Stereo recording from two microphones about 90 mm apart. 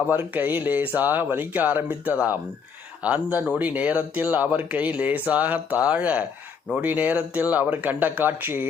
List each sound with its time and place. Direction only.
0.1 s speech: 20° right (ahead or behind)